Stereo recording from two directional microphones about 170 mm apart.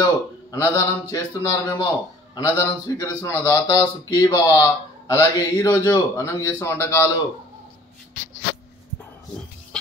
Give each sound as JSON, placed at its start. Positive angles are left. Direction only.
{"t": 0.0, "sound": "speech", "side_deg": 20}